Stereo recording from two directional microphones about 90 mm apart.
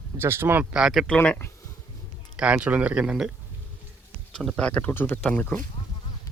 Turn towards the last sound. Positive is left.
turn(degrees=15)  # may be behind; listen again after turning